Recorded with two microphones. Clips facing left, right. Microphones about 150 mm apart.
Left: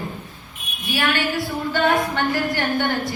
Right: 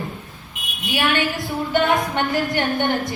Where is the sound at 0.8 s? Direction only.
20° right (ahead or behind).